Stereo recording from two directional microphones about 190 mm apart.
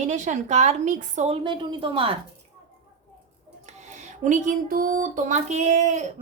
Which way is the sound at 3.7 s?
35° right (ahead or behind).